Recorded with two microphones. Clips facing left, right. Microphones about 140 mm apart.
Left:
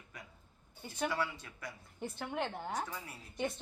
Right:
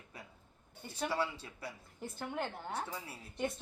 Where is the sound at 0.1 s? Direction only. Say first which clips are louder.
Right 1 dB; 30° right (ahead or behind).